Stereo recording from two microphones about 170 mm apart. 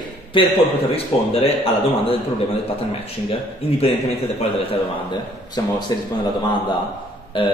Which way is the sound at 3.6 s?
35° left (ahead or behind).